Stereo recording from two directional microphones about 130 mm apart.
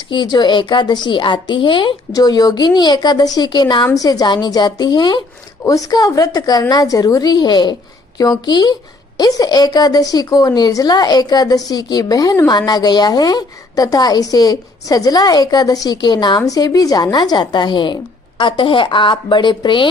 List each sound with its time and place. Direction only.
0.1 s a woman's voice: 35° left (ahead or behind)